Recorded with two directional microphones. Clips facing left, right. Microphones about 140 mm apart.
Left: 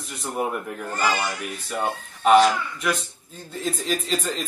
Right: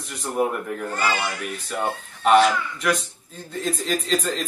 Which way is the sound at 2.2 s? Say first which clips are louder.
Even; 5° left (ahead or behind).